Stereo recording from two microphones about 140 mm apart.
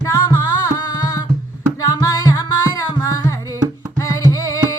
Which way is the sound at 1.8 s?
25° left (ahead or behind).